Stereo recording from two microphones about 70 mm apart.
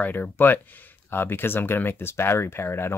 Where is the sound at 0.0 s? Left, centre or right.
Left.